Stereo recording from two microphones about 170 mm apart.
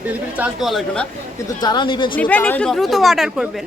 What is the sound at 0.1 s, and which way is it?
Speech, 10° right (ahead or behind).